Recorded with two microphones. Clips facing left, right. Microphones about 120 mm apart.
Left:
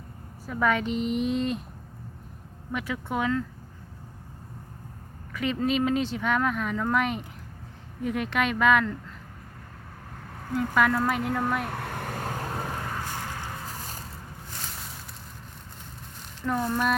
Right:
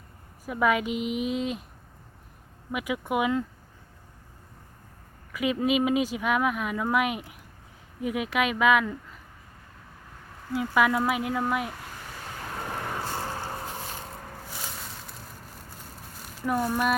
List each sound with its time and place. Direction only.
0.4 s a woman's voice: 10° right (ahead or behind)
2.7 s speech: 10° right (ahead or behind)
5.3 s a woman's voice: 5° right (ahead or behind)
10.6 s a woman's voice: 5° right (ahead or behind)
11.7 s vehicle: 60° left (ahead or behind)
12.9 s vehicle: 15° right (ahead or behind)
16.1 s a sound: 5° right (ahead or behind)